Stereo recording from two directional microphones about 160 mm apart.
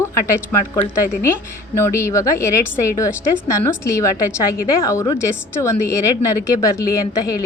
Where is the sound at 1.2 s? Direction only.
15° left (ahead or behind).